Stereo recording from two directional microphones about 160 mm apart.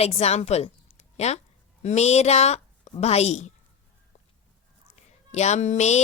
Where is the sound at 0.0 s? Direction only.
40° left (ahead or behind).